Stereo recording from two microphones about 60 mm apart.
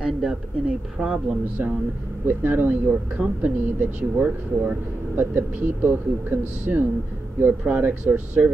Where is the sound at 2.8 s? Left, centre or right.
Centre.